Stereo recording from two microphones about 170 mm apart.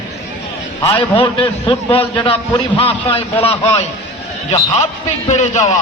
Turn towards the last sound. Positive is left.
turn(degrees=40)  # may be behind; listen again after turning